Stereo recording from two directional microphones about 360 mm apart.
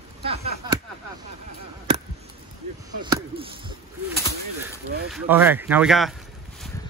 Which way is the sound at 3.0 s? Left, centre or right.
Centre.